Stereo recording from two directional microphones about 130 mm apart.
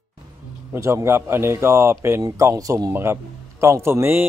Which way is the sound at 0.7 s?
20° right (ahead or behind).